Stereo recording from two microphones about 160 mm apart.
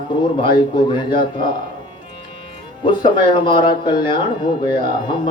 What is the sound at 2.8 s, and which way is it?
Speech, 30° left (ahead or behind).